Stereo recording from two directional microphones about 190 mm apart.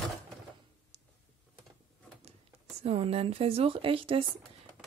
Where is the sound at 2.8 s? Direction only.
30° right (ahead or behind).